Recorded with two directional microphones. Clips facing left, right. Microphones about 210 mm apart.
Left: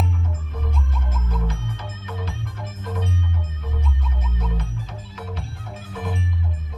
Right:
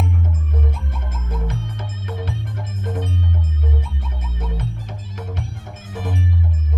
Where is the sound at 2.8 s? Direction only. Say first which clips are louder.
Right 3 dB; 50° right (ahead or behind).